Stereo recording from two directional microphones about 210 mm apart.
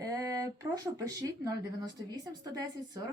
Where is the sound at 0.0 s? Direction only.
15° right (ahead or behind).